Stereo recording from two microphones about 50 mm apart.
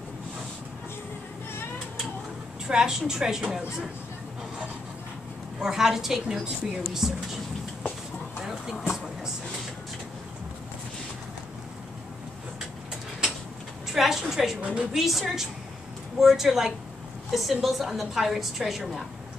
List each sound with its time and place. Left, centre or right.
2.6 s a woman's voice: centre
5.6 s a woman's voice: centre
8.4 s vehicle: centre
13.9 s a sound: centre
14.2 s a woman's voice: centre
14.6 s a woman's voice: right
15.0 s a woman's voice: centre